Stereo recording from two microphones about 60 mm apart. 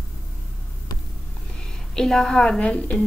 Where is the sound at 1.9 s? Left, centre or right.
Centre.